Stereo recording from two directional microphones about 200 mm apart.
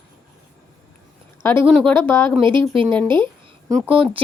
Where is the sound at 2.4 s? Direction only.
25° right (ahead or behind).